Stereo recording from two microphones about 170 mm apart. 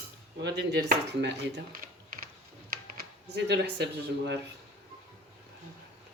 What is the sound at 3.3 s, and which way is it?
Speech, 85° right.